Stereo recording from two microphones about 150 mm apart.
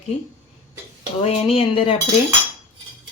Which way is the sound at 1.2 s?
40° left (ahead or behind).